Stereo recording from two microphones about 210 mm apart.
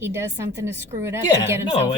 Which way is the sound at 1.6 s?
25° left (ahead or behind).